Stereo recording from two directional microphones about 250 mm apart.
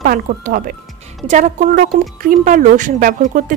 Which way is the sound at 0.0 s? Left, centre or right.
Right.